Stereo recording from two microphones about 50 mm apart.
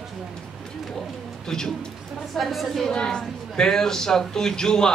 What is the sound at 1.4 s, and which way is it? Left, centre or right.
A woman's voice, centre.